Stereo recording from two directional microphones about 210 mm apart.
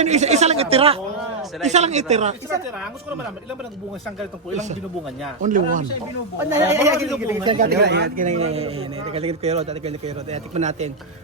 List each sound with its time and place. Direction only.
0.0 s a man's voice: 35° right (ahead or behind)
4.5 s a man's voice: 35° right (ahead or behind)
6.5 s a man's voice: 10° right (ahead or behind)
7.6 s a man's voice: 50° right (ahead or behind); by 10.9 s 35° right (ahead or behind)